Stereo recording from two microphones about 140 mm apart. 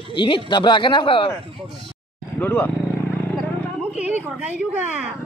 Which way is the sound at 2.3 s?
15° left (ahead or behind).